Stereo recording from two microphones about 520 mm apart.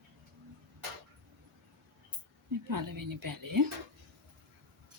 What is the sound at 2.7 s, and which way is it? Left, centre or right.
Speech, right.